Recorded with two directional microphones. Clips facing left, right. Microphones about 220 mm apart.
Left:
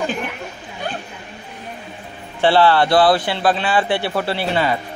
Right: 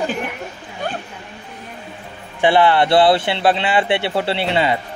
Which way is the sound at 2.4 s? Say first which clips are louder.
Even; 20° right (ahead or behind).